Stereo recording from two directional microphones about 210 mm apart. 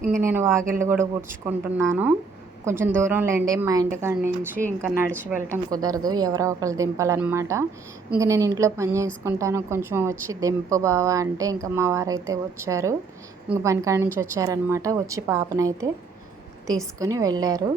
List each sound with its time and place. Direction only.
0.2 s a woman's voice: 10° right (ahead or behind)
17.0 s a woman's voice: 15° right (ahead or behind)